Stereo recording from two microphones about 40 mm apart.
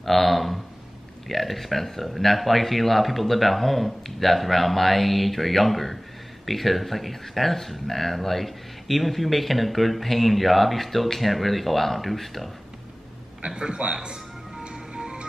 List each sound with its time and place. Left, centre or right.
0.0 s a sound: centre
1.3 s speech: centre
13.6 s a man's voice: right
14.0 s music: right